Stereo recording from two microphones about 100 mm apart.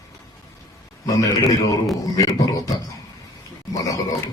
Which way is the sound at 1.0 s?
35° left (ahead or behind).